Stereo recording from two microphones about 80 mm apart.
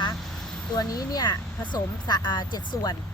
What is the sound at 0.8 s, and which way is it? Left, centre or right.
Speech, left.